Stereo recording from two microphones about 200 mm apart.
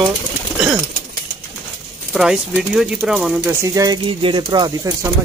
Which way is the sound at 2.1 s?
5° right (ahead or behind).